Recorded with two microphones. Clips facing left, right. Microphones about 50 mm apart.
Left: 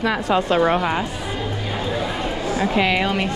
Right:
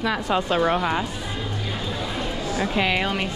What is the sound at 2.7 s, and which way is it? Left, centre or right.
Speech, left.